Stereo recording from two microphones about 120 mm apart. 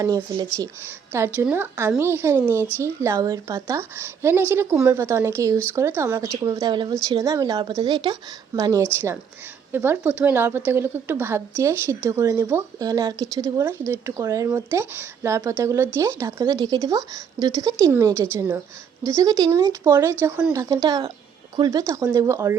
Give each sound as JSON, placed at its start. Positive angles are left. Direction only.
{"t": 0.5, "sound": "a woman's voice", "side_deg": -25}
{"t": 8.8, "sound": "a woman's voice", "side_deg": -20}